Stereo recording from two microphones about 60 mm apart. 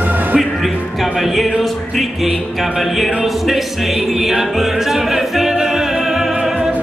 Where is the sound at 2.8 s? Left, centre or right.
Centre.